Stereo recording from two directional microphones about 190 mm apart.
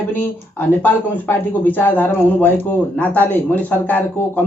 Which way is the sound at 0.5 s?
10° left (ahead or behind).